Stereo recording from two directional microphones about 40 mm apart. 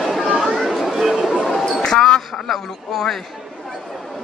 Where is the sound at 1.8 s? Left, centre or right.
Centre.